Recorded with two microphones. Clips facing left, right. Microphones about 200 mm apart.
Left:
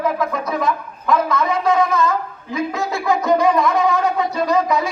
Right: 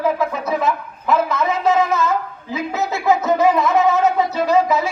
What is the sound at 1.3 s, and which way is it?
Speech, 5° right (ahead or behind).